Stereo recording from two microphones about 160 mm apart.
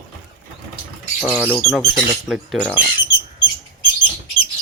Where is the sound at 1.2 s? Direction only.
10° right (ahead or behind).